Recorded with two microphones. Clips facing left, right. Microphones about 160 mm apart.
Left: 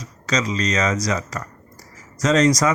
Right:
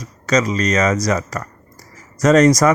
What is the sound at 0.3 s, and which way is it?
Speech, 50° right (ahead or behind).